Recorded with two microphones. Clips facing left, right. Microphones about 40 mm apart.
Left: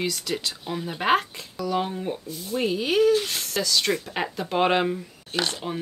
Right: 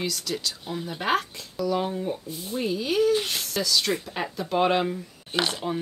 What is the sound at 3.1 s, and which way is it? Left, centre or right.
Speech, centre.